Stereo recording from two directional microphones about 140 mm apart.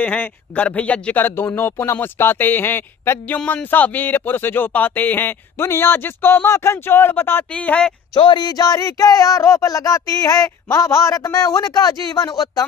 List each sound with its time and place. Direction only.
0.0 s speech: 10° left (ahead or behind)
8.1 s speech: 30° left (ahead or behind)